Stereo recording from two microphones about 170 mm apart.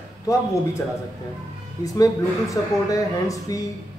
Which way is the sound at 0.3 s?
20° left (ahead or behind).